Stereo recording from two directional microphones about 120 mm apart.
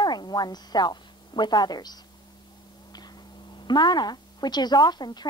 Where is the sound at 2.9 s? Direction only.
35° left (ahead or behind).